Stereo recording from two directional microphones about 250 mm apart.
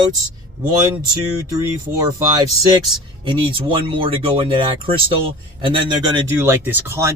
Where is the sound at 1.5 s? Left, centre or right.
Centre.